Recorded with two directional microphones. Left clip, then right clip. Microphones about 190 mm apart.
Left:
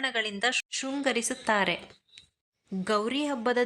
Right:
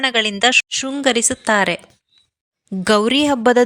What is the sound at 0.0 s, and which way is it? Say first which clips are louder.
Speech: right 12 dB; 45° right (ahead or behind).